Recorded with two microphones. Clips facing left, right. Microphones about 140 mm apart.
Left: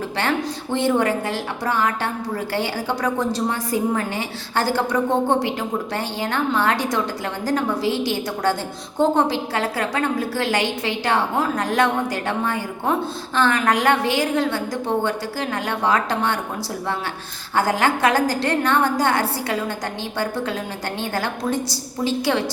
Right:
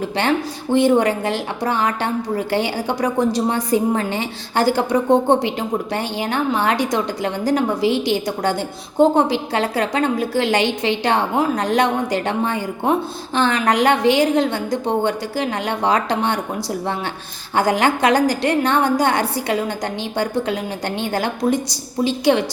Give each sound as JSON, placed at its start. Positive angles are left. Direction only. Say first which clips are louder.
{"t": 0.2, "sound": "a woman's voice", "louder": "right 3 dB", "side_deg": -15}
{"t": 17.5, "sound": "a woman's voice", "louder": "right 2 dB", "side_deg": -20}